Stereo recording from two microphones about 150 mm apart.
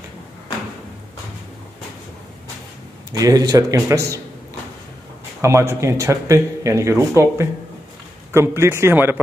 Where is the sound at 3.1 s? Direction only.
25° right (ahead or behind).